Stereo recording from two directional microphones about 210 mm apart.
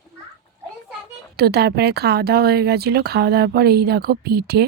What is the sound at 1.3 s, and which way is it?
Speech, 50° right (ahead or behind).